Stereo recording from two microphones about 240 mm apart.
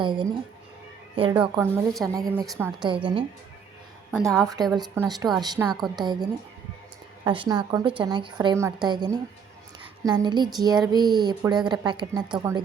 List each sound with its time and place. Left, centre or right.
0.0 s a woman's voice: centre
4.3 s a woman's voice: centre
4.8 s speech: centre